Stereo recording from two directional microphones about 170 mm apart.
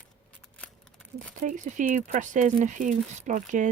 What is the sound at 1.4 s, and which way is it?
Speech, 50° right (ahead or behind).